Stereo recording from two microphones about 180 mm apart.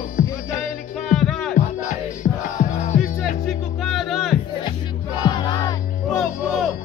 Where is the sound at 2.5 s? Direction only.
45° left (ahead or behind).